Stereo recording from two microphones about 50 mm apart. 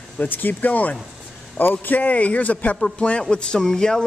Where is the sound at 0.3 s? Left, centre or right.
Left.